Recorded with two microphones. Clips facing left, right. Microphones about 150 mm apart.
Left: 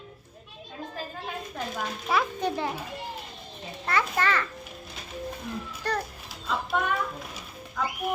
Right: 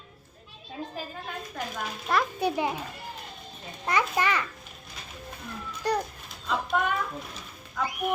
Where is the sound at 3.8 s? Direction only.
15° right (ahead or behind).